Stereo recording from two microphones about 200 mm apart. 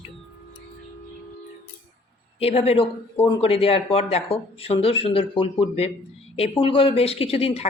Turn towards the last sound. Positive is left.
turn(degrees=30)  # may be behind; listen again after turning